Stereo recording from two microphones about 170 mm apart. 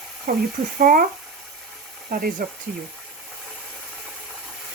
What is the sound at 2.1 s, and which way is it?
Speech, 60° right (ahead or behind).